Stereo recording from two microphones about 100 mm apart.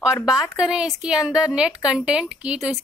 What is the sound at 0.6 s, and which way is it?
A woman's voice, 5° right (ahead or behind).